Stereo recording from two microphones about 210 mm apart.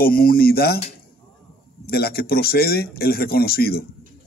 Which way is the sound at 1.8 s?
45° left (ahead or behind).